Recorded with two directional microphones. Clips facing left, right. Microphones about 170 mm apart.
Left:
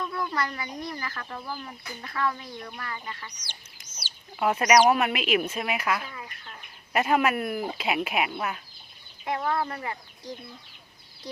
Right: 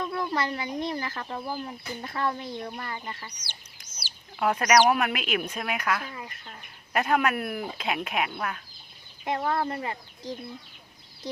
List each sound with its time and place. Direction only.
0.0 s speech: 30° right (ahead or behind)
4.4 s speech: 5° left (ahead or behind)
9.2 s speech: 25° right (ahead or behind)